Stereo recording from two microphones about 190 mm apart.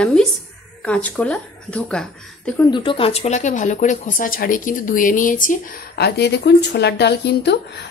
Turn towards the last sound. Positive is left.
turn(degrees=60)  # may be behind; listen again after turning